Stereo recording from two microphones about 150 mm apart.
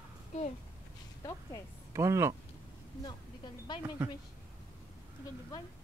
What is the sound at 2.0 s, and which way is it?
Speech, 20° right (ahead or behind).